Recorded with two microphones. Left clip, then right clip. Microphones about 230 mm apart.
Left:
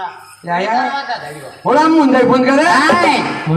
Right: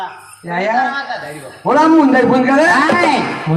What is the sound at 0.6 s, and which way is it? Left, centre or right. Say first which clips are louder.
A man's voice: right 2 dB; left.